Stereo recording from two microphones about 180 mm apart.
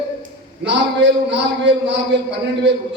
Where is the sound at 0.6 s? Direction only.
80° right.